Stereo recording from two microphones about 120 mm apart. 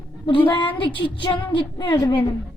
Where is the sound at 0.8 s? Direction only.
45° left (ahead or behind).